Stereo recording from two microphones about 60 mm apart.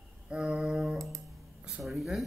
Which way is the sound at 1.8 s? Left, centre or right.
Centre.